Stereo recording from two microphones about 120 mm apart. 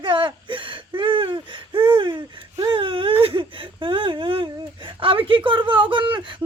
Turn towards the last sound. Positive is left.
turn(degrees=-40)  # may be behind; listen again after turning